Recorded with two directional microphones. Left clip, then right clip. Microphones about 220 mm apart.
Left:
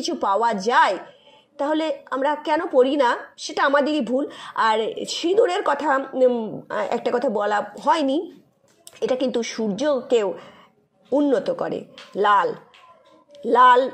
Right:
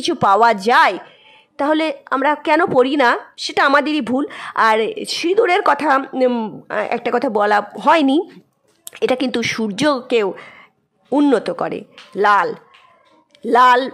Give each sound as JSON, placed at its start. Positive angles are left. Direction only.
{"t": 0.1, "sound": "a woman's voice", "side_deg": -30}
{"t": 6.7, "sound": "a woman's voice", "side_deg": -15}
{"t": 7.3, "sound": "a woman's voice", "side_deg": -30}
{"t": 9.8, "sound": "a woman's voice", "side_deg": -35}
{"t": 10.0, "sound": "a woman's voice", "side_deg": -20}